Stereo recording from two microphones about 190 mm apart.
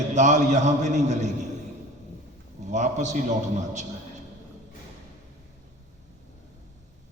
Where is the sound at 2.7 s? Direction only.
40° right (ahead or behind).